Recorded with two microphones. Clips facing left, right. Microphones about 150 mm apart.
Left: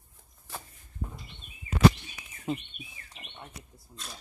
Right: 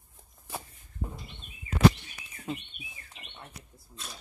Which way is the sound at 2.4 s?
Centre (ahead or behind).